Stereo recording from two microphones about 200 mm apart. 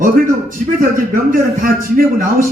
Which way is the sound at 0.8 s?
45° right (ahead or behind).